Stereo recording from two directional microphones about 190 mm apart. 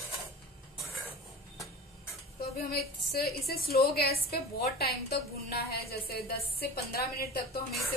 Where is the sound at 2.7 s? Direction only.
55° left (ahead or behind).